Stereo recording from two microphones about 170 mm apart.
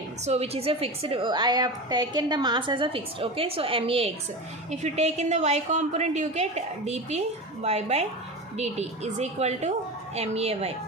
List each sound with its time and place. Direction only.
0.3 s a woman's voice: 35° right (ahead or behind)